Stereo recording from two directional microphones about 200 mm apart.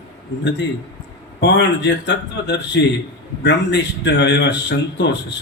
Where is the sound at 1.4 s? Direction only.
60° left (ahead or behind).